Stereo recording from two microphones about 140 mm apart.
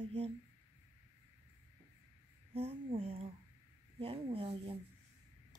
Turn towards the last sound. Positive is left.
turn(degrees=-40)  # may be behind; listen again after turning